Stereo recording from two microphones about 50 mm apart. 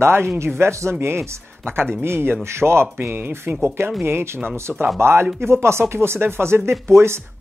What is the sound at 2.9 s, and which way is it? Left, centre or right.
Speech, right.